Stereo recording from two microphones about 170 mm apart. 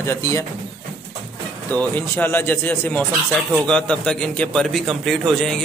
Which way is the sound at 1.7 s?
10° left (ahead or behind).